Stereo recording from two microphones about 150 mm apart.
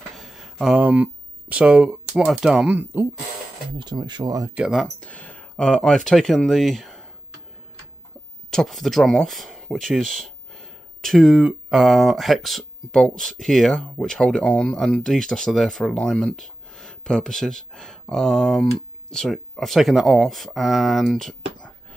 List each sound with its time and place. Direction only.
0.1 s speech: centre (ahead or behind)
3.7 s speech: 30° right (ahead or behind)
4.6 s speech: centre (ahead or behind)
8.5 s speech: centre (ahead or behind)